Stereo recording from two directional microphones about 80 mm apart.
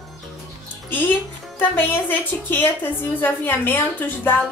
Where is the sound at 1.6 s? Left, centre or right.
Left.